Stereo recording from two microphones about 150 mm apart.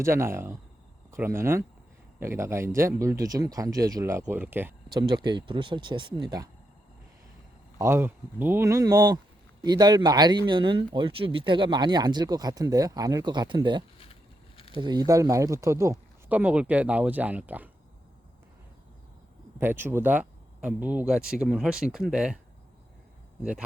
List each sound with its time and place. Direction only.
0.0 s speech: 15° right (ahead or behind)
4.9 s speech: 30° right (ahead or behind)
7.8 s speech: 15° right (ahead or behind)
14.0 s a sound: 40° left (ahead or behind)
14.8 s speech: 30° right (ahead or behind); by 17.7 s 10° right (ahead or behind)
19.5 s speech: 15° right (ahead or behind)
23.4 s speech: 10° right (ahead or behind)